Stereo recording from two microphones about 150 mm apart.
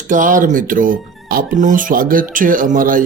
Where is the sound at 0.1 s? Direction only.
60° right (ahead or behind).